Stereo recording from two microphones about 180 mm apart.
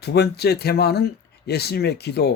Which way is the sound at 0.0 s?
65° left (ahead or behind).